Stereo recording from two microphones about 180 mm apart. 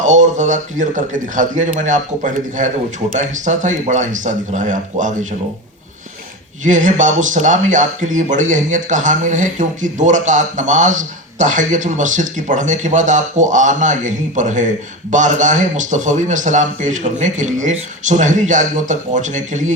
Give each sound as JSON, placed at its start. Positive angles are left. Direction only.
{"t": 0.0, "sound": "speech", "side_deg": -45}
{"t": 6.7, "sound": "speech", "side_deg": -45}